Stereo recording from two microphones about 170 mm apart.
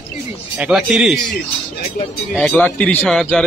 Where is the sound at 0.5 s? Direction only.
5° right (ahead or behind).